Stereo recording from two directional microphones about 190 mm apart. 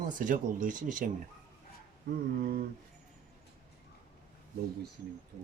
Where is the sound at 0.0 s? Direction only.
45° right (ahead or behind).